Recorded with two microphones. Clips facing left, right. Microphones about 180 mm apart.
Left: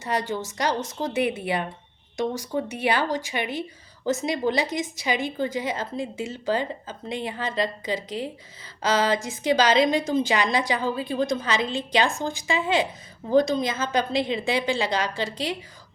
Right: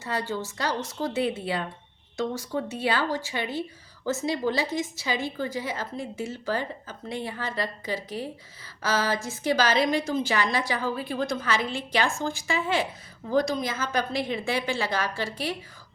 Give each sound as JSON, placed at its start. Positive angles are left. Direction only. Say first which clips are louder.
{"t": 0.0, "sound": "a woman's voice", "louder": "left 3 dB", "side_deg": 20}